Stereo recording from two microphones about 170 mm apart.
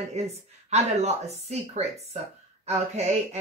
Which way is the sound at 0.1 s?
40° right (ahead or behind).